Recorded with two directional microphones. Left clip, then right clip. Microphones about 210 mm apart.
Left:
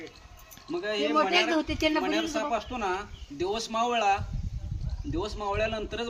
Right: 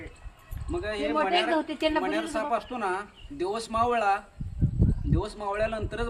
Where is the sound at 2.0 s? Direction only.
5° left (ahead or behind).